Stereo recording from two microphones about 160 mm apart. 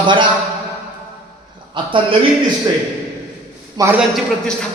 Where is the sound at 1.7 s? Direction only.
30° right (ahead or behind).